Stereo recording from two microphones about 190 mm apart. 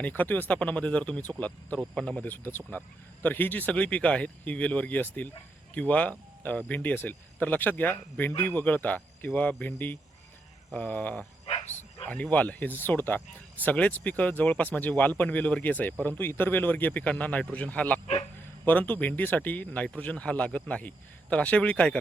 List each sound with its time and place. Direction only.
0.0 s speech: 10° left (ahead or behind)
11.4 s dog: 30° left (ahead or behind)
12.0 s speech: 10° left (ahead or behind)